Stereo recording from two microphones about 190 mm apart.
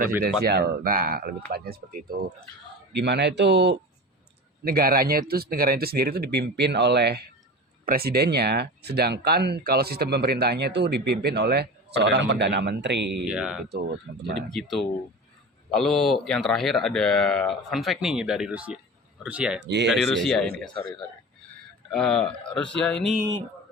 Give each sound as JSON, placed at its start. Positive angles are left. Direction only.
{"t": 0.2, "sound": "speech", "side_deg": -55}
{"t": 2.9, "sound": "speech", "side_deg": -65}
{"t": 4.6, "sound": "speech", "side_deg": -55}
{"t": 13.2, "sound": "speech", "side_deg": -5}
{"t": 13.7, "sound": "speech", "side_deg": -60}
{"t": 14.5, "sound": "speech", "side_deg": 0}
{"t": 19.5, "sound": "speech", "side_deg": -65}
{"t": 19.9, "sound": "speech", "side_deg": 0}
{"t": 21.8, "sound": "speech", "side_deg": 5}